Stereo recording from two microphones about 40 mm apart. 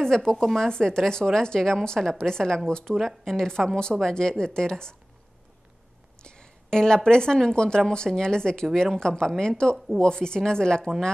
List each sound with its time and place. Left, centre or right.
0.0 s a woman's voice: centre
6.2 s a woman's voice: centre